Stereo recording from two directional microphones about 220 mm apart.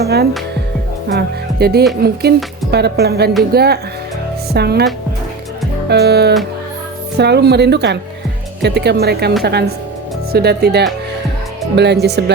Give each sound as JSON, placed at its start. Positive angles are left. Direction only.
{"t": 0.0, "sound": "speech", "side_deg": -45}
{"t": 1.0, "sound": "music", "side_deg": -45}
{"t": 2.7, "sound": "a woman's voice", "side_deg": -45}
{"t": 5.9, "sound": "a woman's voice", "side_deg": -50}